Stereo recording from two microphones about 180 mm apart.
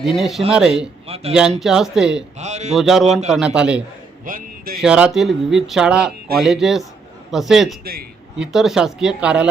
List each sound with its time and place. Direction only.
0.0 s speech: centre (ahead or behind)
1.0 s a man's voice: 35° right (ahead or behind)
1.3 s speech: 5° right (ahead or behind)
2.4 s a man's voice: 40° right (ahead or behind)
2.7 s speech: centre (ahead or behind)
4.3 s a sound: 50° right (ahead or behind)
4.8 s speech: 5° right (ahead or behind)